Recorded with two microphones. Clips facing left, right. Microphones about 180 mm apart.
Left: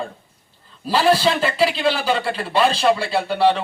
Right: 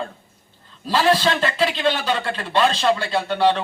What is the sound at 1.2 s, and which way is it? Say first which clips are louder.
A man's voice: left 2 dB; 5° left (ahead or behind).